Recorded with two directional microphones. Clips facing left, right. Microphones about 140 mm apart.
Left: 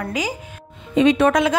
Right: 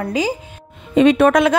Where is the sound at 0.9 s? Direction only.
55° right (ahead or behind).